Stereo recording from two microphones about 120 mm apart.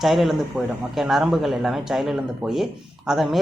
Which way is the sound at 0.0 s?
Centre (ahead or behind).